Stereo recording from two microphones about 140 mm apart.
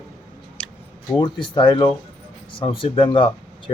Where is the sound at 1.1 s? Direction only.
35° left (ahead or behind).